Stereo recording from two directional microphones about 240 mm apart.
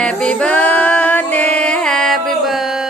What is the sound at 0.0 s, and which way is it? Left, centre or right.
Music, centre.